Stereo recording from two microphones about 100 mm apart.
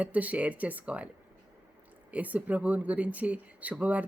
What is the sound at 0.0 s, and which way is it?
Speech, 15° right (ahead or behind).